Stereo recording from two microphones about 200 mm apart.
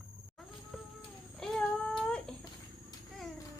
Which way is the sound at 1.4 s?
5° left (ahead or behind).